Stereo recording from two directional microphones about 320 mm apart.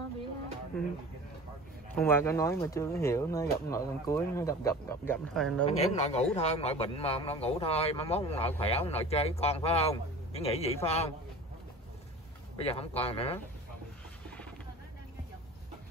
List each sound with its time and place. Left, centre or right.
2.0 s speech: centre
5.7 s speech: centre
12.5 s speech: centre